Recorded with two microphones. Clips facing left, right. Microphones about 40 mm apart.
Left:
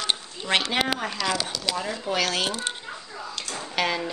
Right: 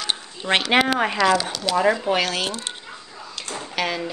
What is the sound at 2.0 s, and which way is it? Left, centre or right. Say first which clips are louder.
Speech: right 5 dB; right.